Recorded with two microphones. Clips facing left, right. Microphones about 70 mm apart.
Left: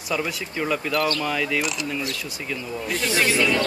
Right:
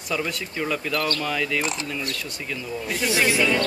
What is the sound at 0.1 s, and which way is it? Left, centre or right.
Speech, centre.